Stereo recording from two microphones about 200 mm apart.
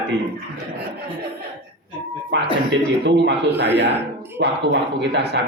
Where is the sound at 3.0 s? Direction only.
60° right (ahead or behind).